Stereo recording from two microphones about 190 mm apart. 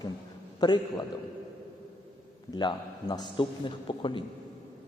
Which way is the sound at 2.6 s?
20° left (ahead or behind).